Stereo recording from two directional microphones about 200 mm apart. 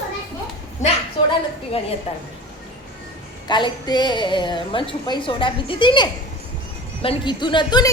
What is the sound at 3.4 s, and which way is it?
A woman's voice, 25° left (ahead or behind).